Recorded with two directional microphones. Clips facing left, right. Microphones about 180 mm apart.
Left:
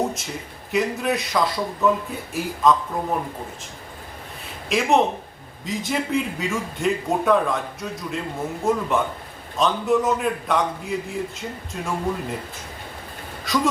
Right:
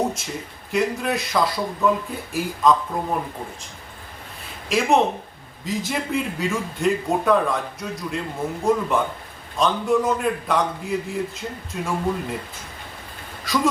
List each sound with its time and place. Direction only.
0.7 s a man's voice: centre (ahead or behind)
4.7 s a man's voice: centre (ahead or behind)
13.5 s a man's voice: centre (ahead or behind)